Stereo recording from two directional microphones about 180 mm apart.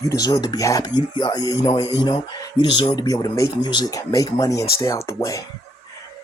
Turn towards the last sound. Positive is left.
turn(degrees=20)  # may be behind; listen again after turning